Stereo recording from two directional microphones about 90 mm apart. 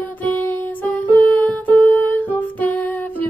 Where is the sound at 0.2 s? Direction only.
20° left (ahead or behind).